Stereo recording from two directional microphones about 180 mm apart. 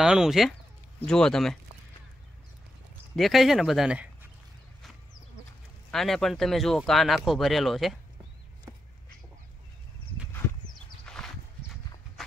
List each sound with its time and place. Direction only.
0.0 s speech: 5° right (ahead or behind)
3.2 s speech: centre (ahead or behind)
5.9 s speech: centre (ahead or behind)
8.7 s a sound: 20° right (ahead or behind)
11.2 s walk: 5° left (ahead or behind)